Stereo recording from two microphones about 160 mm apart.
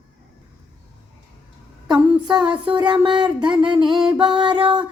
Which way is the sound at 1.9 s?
25° right (ahead or behind).